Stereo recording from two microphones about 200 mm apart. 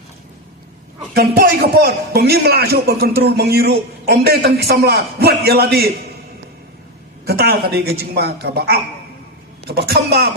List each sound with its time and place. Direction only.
1.1 s a man's voice: 50° right (ahead or behind)
7.3 s a man's voice: 50° right (ahead or behind)